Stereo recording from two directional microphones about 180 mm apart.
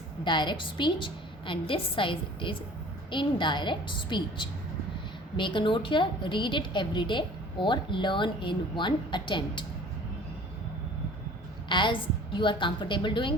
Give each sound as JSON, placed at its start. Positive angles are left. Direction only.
{"t": 0.3, "sound": "a woman's voice", "side_deg": 25}
{"t": 11.7, "sound": "a woman's voice", "side_deg": 25}